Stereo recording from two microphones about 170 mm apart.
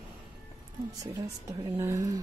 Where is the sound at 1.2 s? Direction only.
20° right (ahead or behind).